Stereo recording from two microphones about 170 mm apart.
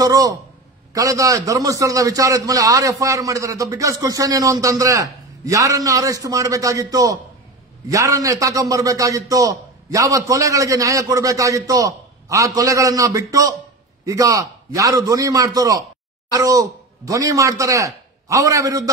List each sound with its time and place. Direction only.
0.0 s a man's voice: 20° right (ahead or behind)